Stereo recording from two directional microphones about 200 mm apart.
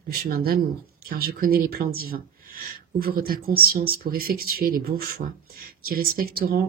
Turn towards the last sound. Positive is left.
turn(degrees=-50)  # may be behind; listen again after turning